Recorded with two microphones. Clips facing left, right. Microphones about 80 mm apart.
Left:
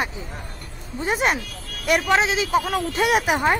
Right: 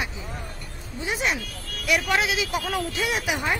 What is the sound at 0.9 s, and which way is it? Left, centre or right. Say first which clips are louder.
Speech: left 5 dB; left.